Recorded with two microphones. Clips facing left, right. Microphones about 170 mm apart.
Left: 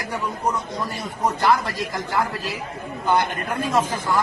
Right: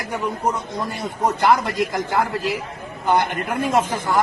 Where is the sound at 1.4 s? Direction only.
20° right (ahead or behind).